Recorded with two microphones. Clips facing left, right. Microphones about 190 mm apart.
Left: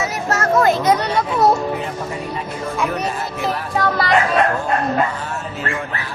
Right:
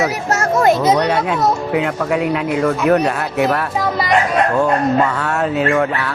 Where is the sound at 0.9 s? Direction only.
70° right (ahead or behind); by 2.7 s 85° right.